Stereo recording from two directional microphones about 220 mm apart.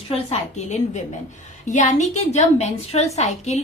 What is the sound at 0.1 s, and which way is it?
A woman's voice, 30° left (ahead or behind).